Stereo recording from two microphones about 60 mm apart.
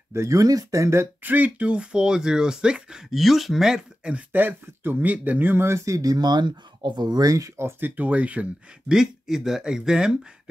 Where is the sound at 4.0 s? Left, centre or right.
Centre.